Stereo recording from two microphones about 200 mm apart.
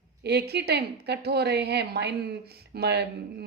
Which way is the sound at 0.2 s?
55° right (ahead or behind).